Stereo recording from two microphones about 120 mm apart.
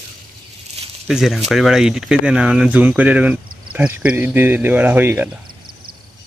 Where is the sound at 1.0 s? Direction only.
5° right (ahead or behind).